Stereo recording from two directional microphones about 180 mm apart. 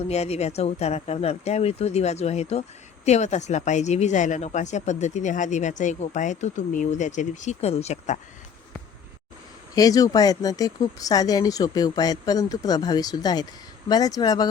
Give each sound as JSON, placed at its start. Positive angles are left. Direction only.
{"t": 0.0, "sound": "speech", "side_deg": 35}
{"t": 9.7, "sound": "speech", "side_deg": 20}